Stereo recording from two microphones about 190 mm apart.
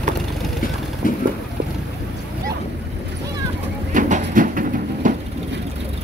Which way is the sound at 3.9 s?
45° right (ahead or behind).